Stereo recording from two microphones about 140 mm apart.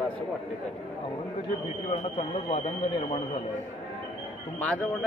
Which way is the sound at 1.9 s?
45° left (ahead or behind).